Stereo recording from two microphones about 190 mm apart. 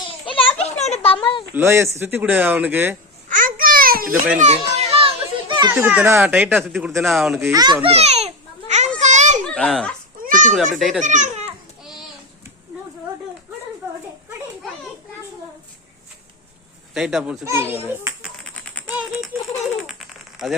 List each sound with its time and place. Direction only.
0.1 s a sound: 30° left (ahead or behind)
1.5 s speech: 15° right (ahead or behind)
3.2 s babbling: 45° right (ahead or behind)
4.4 s a child's voice: 35° right (ahead or behind); by 6.7 s 10° right (ahead or behind)
6.7 s speech: centre (ahead or behind)
7.3 s a child's voice: 15° right (ahead or behind); by 8.9 s 35° right (ahead or behind)
9.0 s children playing: 40° right (ahead or behind)
9.5 s speech: 5° left (ahead or behind)
10.2 s cat: 45° right (ahead or behind)
10.8 s speech: centre (ahead or behind)
11.0 s a child's voice: 40° right (ahead or behind)
16.9 s a child's voice: centre (ahead or behind)
18.4 s a sound: 5° left (ahead or behind)